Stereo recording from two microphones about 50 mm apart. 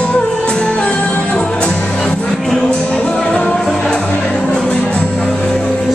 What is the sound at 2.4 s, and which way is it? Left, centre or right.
Music, centre.